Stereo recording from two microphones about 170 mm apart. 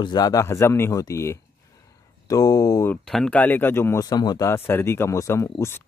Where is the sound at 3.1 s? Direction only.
5° left (ahead or behind).